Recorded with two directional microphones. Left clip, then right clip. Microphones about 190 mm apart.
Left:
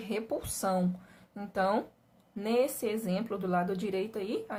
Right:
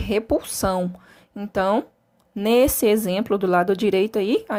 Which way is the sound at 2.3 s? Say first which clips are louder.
Right 11 dB; 50° right (ahead or behind).